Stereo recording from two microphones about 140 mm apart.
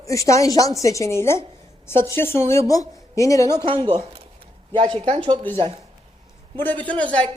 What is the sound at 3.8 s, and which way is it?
Speech, 45° right (ahead or behind).